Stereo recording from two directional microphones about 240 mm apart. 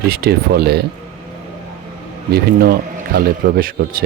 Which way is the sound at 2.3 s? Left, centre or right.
Right.